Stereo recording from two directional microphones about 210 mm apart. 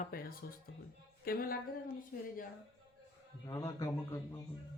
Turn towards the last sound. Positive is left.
turn(degrees=15)  # may be behind; listen again after turning